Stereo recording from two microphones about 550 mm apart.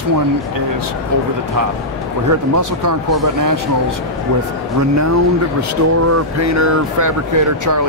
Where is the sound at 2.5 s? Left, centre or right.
Right.